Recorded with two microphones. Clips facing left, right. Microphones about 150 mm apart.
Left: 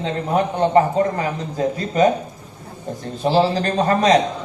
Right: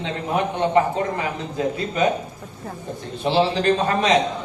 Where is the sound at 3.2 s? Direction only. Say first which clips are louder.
Left 2 dB; 40° left (ahead or behind).